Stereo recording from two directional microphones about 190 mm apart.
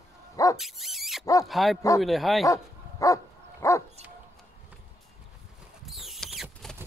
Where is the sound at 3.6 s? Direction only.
15° left (ahead or behind).